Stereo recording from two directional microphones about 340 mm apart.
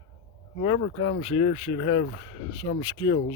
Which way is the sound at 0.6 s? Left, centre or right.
Centre.